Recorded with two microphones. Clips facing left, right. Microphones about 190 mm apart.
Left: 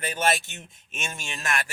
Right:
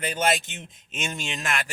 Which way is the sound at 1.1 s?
20° right (ahead or behind).